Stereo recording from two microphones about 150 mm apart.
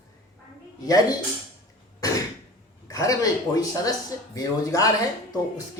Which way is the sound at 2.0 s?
25° left (ahead or behind).